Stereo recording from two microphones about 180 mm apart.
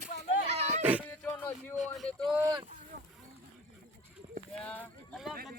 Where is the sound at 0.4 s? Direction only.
40° right (ahead or behind).